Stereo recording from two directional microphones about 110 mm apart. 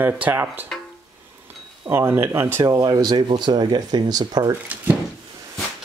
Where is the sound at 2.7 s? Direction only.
35° right (ahead or behind).